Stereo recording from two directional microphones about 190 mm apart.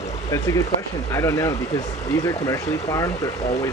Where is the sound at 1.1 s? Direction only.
15° left (ahead or behind).